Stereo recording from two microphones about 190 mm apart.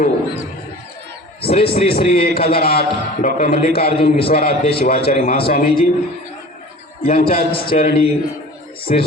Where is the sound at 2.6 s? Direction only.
55° left (ahead or behind).